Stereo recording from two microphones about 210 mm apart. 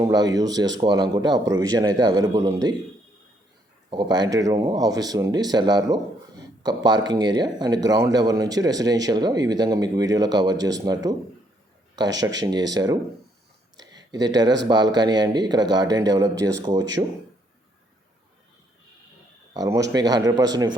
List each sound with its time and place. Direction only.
0.0 s speech: 20° right (ahead or behind)
3.8 s speech: 20° right (ahead or behind)
13.7 s a sound: 20° right (ahead or behind)
14.7 s speech: 20° right (ahead or behind)
19.5 s speech: 15° right (ahead or behind)